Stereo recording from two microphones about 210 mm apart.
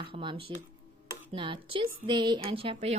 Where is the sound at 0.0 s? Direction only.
25° right (ahead or behind).